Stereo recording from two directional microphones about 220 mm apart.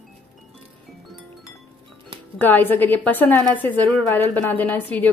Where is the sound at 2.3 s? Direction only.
10° left (ahead or behind).